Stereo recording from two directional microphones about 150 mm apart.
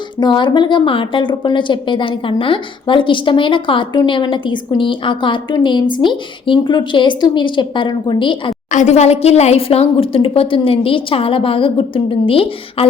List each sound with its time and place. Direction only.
0.2 s a woman's voice: 30° left (ahead or behind)
8.7 s a woman's voice: 50° left (ahead or behind)